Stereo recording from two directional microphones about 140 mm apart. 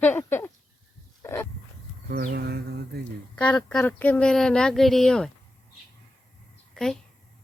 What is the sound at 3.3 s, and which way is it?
Speech, 10° left (ahead or behind).